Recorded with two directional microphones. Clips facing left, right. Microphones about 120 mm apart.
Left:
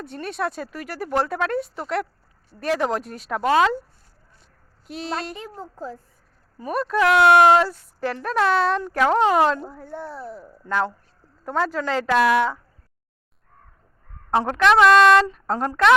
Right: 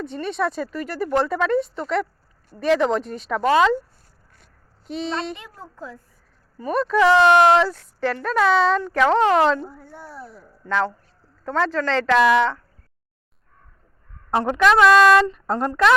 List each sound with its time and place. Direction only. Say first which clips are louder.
0.0 s speech: right 3 dB; 5° left (ahead or behind)
4.9 s speech: right 3 dB; 5° left (ahead or behind)
5.3 s a woman's voice: left 1 dB; 35° left (ahead or behind)
6.6 s speech: right 3 dB; 5° left (ahead or behind)
9.6 s speech: left 5 dB; centre (ahead or behind)
10.2 s a woman's voice: left 4 dB; 35° left (ahead or behind)
10.7 s speech: right 1 dB; 10° left (ahead or behind)
14.3 s speech: even; centre (ahead or behind)